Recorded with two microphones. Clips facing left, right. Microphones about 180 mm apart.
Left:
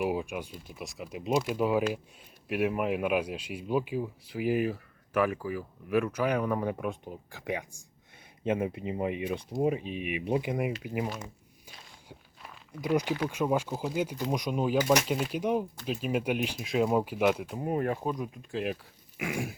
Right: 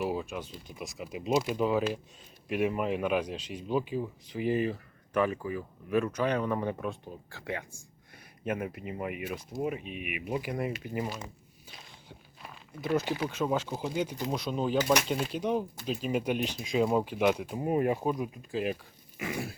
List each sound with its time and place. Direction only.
0.0 s speech: 15° left (ahead or behind)
0.7 s speech: centre (ahead or behind); by 10.7 s 20° left (ahead or behind)
10.8 s speech: 10° left (ahead or behind)
12.8 s speech: 15° left (ahead or behind)
17.5 s speech: 5° right (ahead or behind); by 19.5 s 10° left (ahead or behind)